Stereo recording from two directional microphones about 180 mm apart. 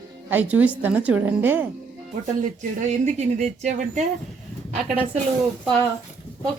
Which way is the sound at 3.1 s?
40° right (ahead or behind).